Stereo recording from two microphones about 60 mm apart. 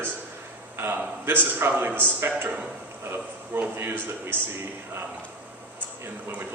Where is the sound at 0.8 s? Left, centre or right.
Right.